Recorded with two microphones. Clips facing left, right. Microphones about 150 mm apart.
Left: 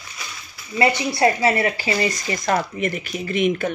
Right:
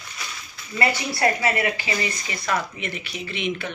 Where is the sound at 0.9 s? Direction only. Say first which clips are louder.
Left 4 dB; 20° left (ahead or behind).